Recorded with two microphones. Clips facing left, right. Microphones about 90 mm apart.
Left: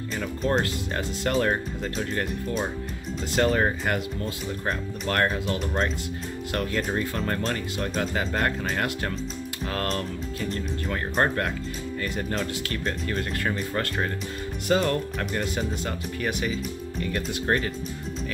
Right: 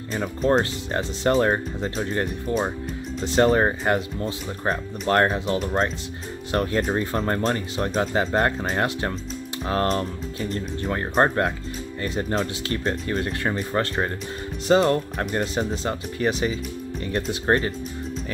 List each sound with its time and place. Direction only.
0.4 s speech: 30° right (ahead or behind)
3.3 s speech: 30° right (ahead or behind)